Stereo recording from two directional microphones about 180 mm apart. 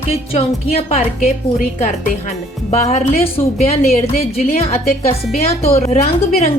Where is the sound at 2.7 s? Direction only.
35° left (ahead or behind).